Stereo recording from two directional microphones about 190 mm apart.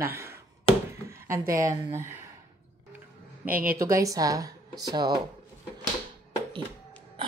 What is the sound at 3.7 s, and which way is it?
Speech, 15° right (ahead or behind).